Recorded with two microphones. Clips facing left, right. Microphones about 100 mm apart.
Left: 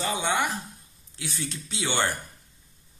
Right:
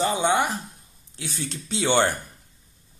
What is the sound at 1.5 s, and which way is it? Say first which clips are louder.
Speech: right 10 dB; 30° right (ahead or behind).